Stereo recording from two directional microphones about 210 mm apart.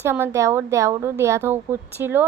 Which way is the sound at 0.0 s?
10° right (ahead or behind).